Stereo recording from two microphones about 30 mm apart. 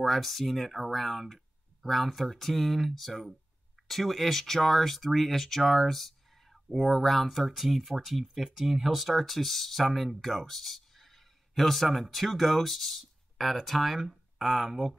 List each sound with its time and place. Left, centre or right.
0.0 s speech: centre
14.7 s speech: centre